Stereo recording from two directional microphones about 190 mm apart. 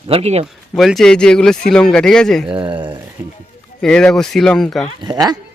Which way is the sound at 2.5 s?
25° right (ahead or behind).